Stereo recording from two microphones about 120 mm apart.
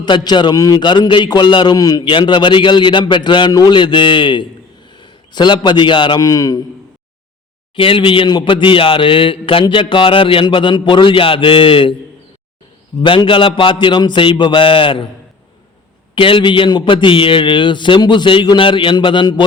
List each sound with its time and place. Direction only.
0.3 s a man's voice: 35° left (ahead or behind)
2.0 s a man's voice: 40° left (ahead or behind)
6.2 s a man's voice: 30° left (ahead or behind)
7.8 s a man's voice: 45° left (ahead or behind)
13.0 s a man's voice: 45° left (ahead or behind)
16.1 s a man's voice: 45° left (ahead or behind)